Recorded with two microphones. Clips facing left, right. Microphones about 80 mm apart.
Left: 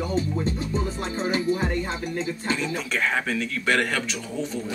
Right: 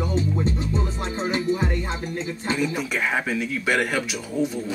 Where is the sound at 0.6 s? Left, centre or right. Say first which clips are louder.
Right 1 dB; right.